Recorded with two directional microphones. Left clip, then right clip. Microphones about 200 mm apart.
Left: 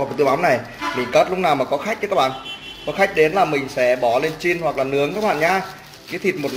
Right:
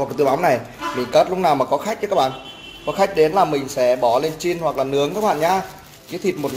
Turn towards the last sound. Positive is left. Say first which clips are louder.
# left 1 dB
turn(degrees=-10)  # may be behind; listen again after turning